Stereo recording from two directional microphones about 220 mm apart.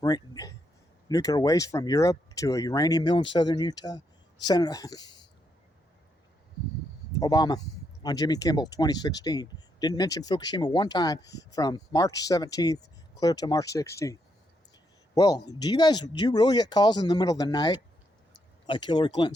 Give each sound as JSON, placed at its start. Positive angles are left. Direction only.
{"t": 0.0, "sound": "speech", "side_deg": 15}
{"t": 7.2, "sound": "speech", "side_deg": 20}